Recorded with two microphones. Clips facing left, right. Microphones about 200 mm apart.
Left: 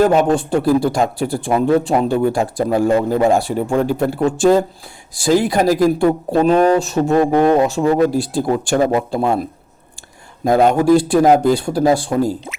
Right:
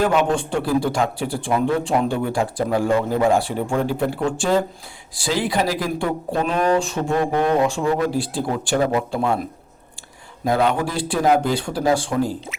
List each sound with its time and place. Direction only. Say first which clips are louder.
0.0 s speech: left 5 dB; 40° left (ahead or behind)
10.4 s speech: left 7 dB; 45° left (ahead or behind)